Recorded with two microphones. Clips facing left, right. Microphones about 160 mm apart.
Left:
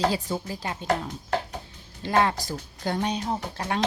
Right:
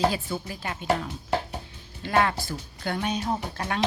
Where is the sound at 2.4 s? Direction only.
35° left (ahead or behind).